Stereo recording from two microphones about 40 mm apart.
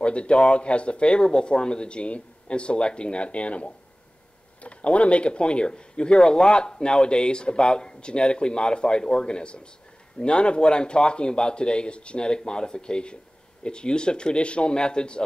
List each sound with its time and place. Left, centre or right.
0.0 s speech: left